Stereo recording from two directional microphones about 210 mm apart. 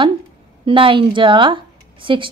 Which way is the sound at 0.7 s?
25° right (ahead or behind).